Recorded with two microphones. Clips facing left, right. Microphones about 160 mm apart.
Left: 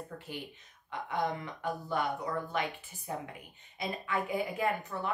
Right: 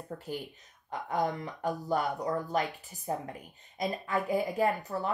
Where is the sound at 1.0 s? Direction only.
40° right (ahead or behind).